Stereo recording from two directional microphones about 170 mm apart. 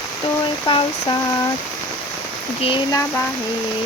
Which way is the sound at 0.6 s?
25° left (ahead or behind).